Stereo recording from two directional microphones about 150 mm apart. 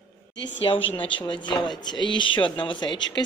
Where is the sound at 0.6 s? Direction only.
35° left (ahead or behind).